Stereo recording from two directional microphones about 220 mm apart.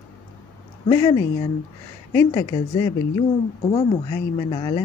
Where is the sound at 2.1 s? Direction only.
15° left (ahead or behind).